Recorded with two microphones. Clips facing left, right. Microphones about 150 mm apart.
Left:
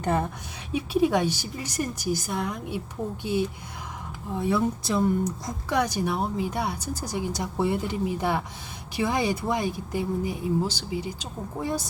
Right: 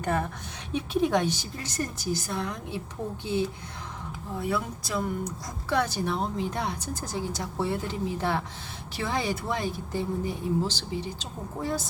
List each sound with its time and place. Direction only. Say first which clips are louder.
0.0 s a woman's voice: left 2 dB; 20° left (ahead or behind)
0.7 s speech: left 2 dB; 10° left (ahead or behind)
4.4 s speech: left 6 dB; 20° left (ahead or behind)
5.2 s speech: left 5 dB; 15° left (ahead or behind)